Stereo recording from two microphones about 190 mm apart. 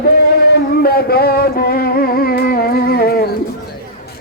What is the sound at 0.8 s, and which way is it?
Music, 55° left (ahead or behind).